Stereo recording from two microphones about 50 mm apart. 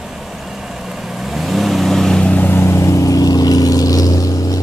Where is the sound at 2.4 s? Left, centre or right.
Left.